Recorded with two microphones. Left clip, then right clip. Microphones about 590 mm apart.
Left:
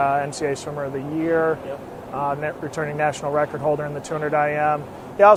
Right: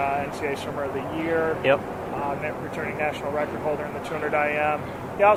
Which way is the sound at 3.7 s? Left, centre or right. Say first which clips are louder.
Left 4 dB; left.